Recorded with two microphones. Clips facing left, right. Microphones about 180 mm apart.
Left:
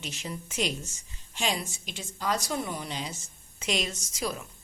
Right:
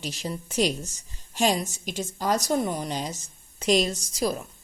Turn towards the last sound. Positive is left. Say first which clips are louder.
# right 6 dB
turn(degrees=-35)  # may be behind; listen again after turning